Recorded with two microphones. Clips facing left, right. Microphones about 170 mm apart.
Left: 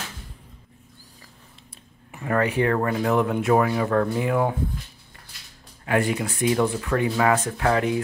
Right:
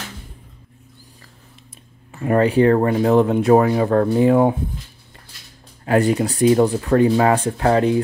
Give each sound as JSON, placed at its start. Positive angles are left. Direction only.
{"t": 2.2, "sound": "speech", "side_deg": -25}
{"t": 5.9, "sound": "speech", "side_deg": -40}